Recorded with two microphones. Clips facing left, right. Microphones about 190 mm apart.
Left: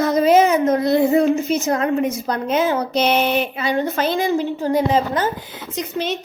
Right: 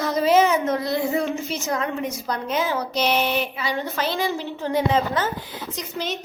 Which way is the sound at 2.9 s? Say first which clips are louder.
Left 4 dB; 25° left (ahead or behind).